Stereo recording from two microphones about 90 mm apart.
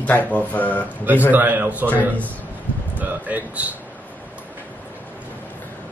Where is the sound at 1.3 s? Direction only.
20° right (ahead or behind).